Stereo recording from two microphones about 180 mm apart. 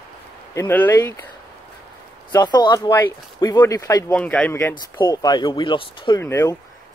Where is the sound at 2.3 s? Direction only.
25° left (ahead or behind).